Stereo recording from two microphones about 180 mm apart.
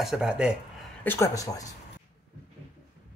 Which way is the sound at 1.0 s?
15° left (ahead or behind).